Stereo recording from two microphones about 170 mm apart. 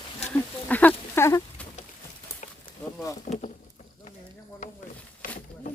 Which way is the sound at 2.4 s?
50° left (ahead or behind).